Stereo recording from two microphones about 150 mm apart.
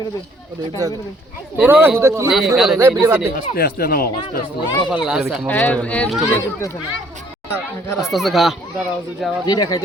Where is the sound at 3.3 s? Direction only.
90° left.